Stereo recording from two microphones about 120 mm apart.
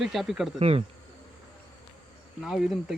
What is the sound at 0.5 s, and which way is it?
Speech, 55° right (ahead or behind).